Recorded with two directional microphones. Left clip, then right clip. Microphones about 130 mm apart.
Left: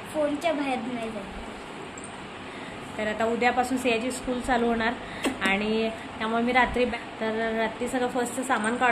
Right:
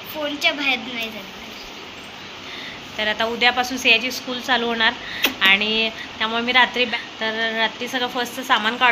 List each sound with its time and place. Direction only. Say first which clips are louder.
0.4 s a woman's voice: right 7 dB; 25° left (ahead or behind)
3.0 s speech: right 6 dB; 5° left (ahead or behind)